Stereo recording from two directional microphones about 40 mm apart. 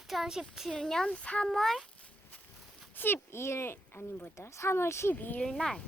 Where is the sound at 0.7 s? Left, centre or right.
Centre.